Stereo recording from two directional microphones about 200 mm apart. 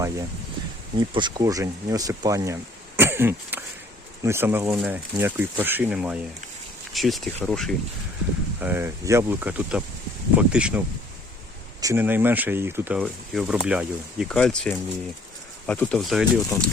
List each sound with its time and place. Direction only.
0.9 s speech: 20° right (ahead or behind); by 7.8 s centre (ahead or behind)
8.6 s speech: 10° right (ahead or behind)